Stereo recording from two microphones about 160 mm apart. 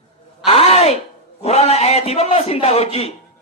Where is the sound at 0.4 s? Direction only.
40° left (ahead or behind).